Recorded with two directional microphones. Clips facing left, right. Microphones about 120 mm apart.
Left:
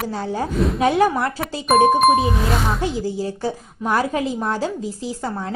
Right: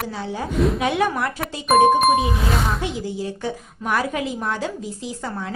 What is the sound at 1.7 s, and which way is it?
Speech, centre (ahead or behind).